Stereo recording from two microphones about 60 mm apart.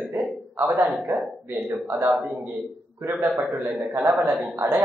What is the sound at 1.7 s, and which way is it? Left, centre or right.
Speech, right.